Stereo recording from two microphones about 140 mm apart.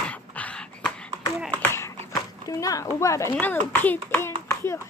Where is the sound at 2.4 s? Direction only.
25° left (ahead or behind).